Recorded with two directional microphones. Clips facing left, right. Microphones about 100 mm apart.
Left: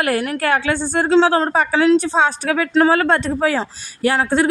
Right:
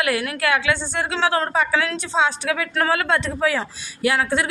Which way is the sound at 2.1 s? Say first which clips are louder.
Left 4 dB; 45° left (ahead or behind).